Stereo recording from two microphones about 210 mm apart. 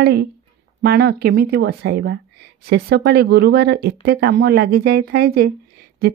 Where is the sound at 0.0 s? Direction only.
50° right (ahead or behind).